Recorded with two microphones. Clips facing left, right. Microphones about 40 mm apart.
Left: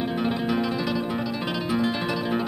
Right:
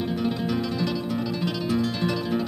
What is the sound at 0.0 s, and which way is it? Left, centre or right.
Music, left.